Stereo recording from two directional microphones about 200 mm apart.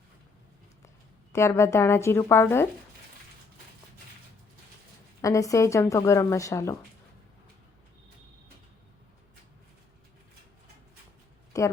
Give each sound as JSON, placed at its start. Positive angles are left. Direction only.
{"t": 1.3, "sound": "speech", "side_deg": 15}
{"t": 5.2, "sound": "speech", "side_deg": 15}
{"t": 11.5, "sound": "a sound", "side_deg": 15}